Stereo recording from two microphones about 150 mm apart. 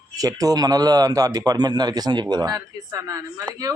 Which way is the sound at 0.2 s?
25° right (ahead or behind).